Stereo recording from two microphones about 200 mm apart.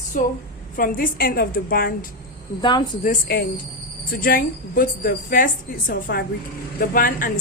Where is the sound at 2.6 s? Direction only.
20° left (ahead or behind).